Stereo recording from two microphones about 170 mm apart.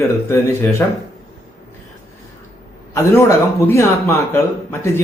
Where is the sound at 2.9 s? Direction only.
15° left (ahead or behind).